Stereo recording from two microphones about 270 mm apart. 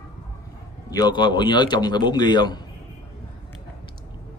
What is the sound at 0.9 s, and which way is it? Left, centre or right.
A man's voice, centre.